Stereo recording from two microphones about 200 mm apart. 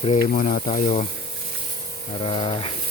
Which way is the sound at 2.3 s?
25° left (ahead or behind).